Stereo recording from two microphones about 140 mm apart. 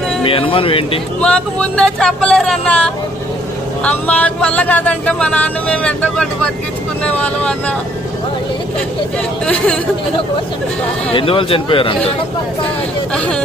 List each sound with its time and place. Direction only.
0.2 s speech: 40° left (ahead or behind)
1.2 s speech: 10° left (ahead or behind)
9.5 s speech: 10° left (ahead or behind)
11.1 s speech: 40° left (ahead or behind)
13.1 s speech: 10° left (ahead or behind)